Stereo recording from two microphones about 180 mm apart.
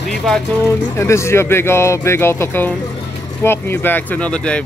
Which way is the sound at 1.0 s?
15° left (ahead or behind).